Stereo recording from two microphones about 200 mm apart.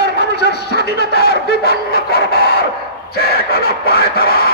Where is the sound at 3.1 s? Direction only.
50° left (ahead or behind).